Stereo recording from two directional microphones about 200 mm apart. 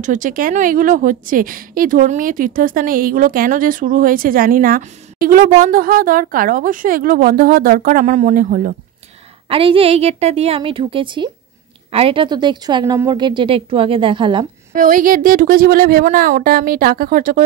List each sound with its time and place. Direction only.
0.0 s a woman's voice: 40° right (ahead or behind)
9.5 s a woman's voice: 30° right (ahead or behind)
14.8 s a woman's voice: 40° right (ahead or behind)